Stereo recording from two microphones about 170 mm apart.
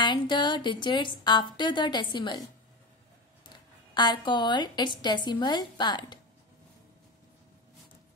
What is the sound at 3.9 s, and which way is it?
A woman's voice, 25° left (ahead or behind).